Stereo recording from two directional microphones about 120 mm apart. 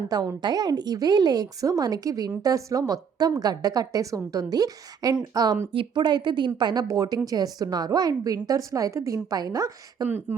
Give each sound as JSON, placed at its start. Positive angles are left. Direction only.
{"t": 0.1, "sound": "a woman's voice", "side_deg": -35}
{"t": 5.7, "sound": "a woman's voice", "side_deg": -45}
{"t": 10.1, "sound": "speech", "side_deg": -20}